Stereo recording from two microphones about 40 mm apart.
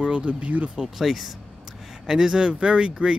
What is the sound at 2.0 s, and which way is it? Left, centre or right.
Speech, centre.